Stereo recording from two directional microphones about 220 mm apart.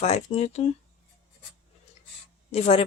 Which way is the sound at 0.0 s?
30° left (ahead or behind).